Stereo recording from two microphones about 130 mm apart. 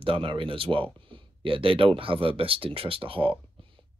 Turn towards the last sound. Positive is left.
turn(degrees=-45)  # may be behind; listen again after turning